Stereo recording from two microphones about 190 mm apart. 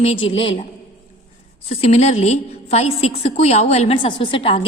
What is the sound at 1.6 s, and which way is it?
A woman's voice, 35° left (ahead or behind).